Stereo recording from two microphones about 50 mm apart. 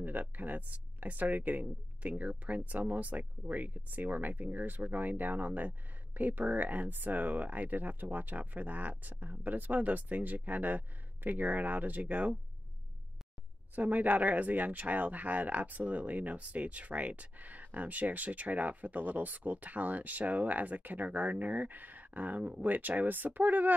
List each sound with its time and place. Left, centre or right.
0.4 s speech: right
13.7 s speech: right